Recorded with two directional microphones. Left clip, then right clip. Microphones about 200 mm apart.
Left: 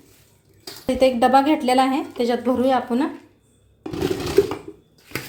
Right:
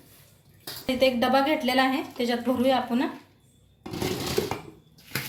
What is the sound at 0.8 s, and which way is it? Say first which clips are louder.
A woman's voice: left 6 dB; 45° left (ahead or behind).